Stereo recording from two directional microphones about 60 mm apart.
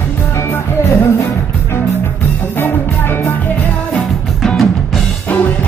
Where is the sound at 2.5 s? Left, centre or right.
Left.